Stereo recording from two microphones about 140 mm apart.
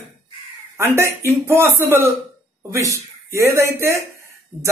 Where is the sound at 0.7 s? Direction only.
20° right (ahead or behind).